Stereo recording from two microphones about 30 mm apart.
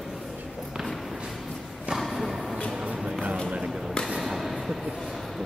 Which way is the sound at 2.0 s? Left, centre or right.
Centre.